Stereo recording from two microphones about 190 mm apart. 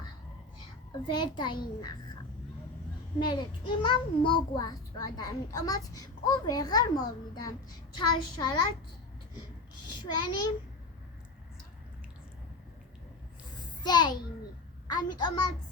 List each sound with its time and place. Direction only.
1.0 s a child's voice: 25° left (ahead or behind)
3.2 s a child's voice: 25° left (ahead or behind)
10.0 s a child's voice: 20° left (ahead or behind)
13.8 s a child's voice: 20° left (ahead or behind)